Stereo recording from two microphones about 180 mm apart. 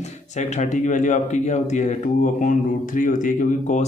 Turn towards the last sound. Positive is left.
turn(degrees=45)  # may be behind; listen again after turning